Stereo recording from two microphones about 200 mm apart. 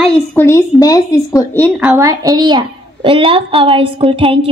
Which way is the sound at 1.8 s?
10° right (ahead or behind).